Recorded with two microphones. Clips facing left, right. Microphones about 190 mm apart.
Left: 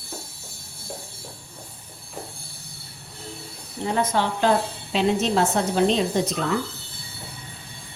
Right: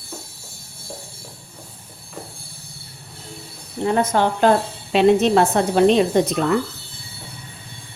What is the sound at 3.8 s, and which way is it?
A woman's voice, 50° right (ahead or behind).